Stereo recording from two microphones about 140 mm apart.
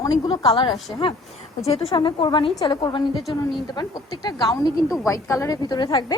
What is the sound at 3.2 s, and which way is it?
Speech, centre (ahead or behind).